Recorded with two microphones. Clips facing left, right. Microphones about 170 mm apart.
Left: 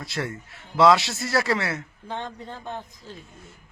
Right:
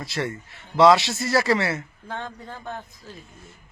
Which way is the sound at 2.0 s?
20° left (ahead or behind).